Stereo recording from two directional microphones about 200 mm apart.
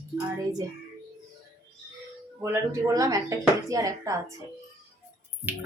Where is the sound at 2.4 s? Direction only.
15° right (ahead or behind).